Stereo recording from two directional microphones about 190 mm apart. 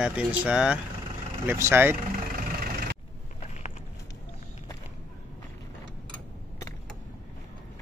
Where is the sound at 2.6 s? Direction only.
50° right (ahead or behind).